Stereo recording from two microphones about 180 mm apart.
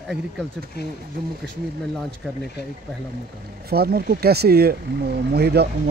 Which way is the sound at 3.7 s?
60° right (ahead or behind).